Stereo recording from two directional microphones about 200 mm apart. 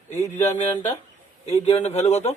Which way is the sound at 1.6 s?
30° left (ahead or behind).